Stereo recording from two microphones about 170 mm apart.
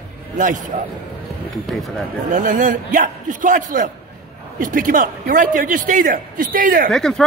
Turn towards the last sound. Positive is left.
turn(degrees=5)  # may be behind; listen again after turning